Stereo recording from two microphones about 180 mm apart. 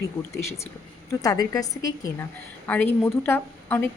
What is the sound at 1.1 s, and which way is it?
A woman's voice, 20° left (ahead or behind).